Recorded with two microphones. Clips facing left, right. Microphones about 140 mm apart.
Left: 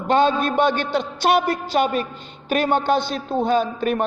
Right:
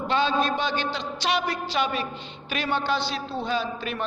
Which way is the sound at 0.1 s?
55° left (ahead or behind).